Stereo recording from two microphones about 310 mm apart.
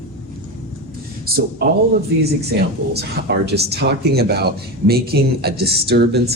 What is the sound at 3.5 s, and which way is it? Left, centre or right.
Speech, right.